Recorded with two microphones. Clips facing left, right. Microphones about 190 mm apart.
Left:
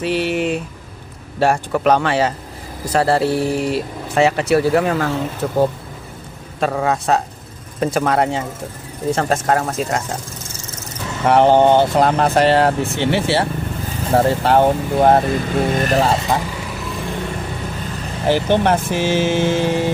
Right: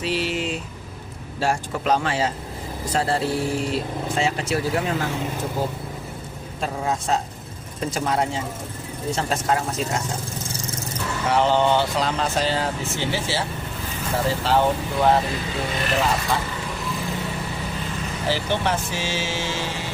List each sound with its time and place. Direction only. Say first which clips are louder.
0.0 s a sound: left 6 dB; 60° left (ahead or behind)
1.4 s speech: left 7 dB; 65° left (ahead or behind)
6.6 s speech: left 7 dB; 70° left (ahead or behind)
9.1 s speech: left 5 dB; 55° left (ahead or behind)
11.3 s speech: left 8 dB; 55° left (ahead or behind); by 16.1 s 40° left (ahead or behind)
18.3 s speech: left 9 dB; 55° left (ahead or behind)